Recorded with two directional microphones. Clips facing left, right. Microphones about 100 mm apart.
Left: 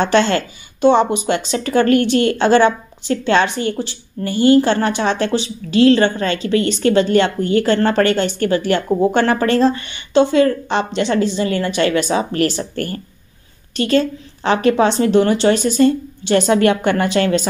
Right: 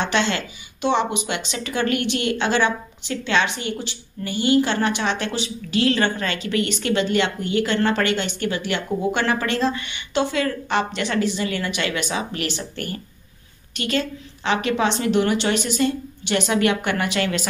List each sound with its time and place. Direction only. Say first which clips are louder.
0.0 s speech: left 7 dB; 40° left (ahead or behind)